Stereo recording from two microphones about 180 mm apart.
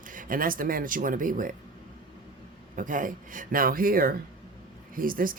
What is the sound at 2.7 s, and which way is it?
Speech, 45° right (ahead or behind).